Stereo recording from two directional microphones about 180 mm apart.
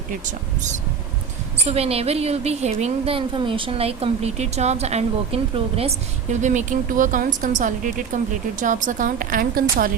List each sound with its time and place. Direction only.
0.1 s a woman's voice: 45° right (ahead or behind)